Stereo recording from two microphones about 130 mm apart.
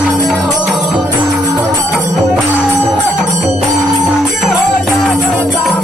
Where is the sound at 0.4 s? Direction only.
Centre (ahead or behind).